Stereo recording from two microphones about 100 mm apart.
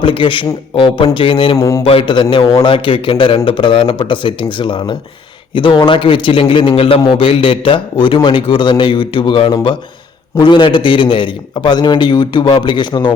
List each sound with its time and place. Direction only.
0.0 s a man's voice: 60° left (ahead or behind)
1.5 s a man's voice: 30° left (ahead or behind)
1.8 s a man's voice: 65° left (ahead or behind); by 13.1 s 50° left (ahead or behind)